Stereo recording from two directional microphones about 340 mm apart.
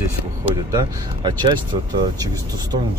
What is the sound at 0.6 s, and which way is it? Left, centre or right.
Speech, centre.